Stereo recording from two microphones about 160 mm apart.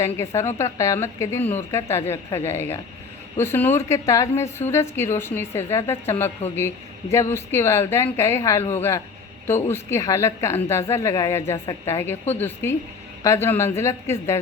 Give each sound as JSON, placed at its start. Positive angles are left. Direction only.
{"t": 0.0, "sound": "a woman's voice", "side_deg": 15}